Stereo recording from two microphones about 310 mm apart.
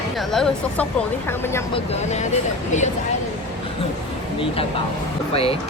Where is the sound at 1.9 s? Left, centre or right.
Left.